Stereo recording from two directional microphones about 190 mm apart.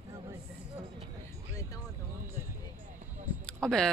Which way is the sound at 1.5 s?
15° left (ahead or behind).